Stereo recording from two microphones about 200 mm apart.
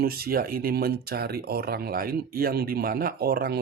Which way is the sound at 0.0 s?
50° right (ahead or behind).